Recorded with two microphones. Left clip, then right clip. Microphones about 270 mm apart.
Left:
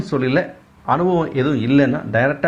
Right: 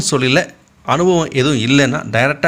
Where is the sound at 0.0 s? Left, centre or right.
Right.